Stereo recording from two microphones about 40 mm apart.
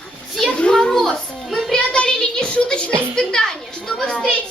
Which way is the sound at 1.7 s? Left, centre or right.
Left.